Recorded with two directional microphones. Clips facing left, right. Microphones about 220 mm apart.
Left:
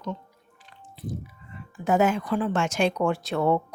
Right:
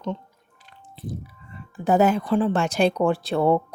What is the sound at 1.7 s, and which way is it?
A woman's voice, 35° right (ahead or behind).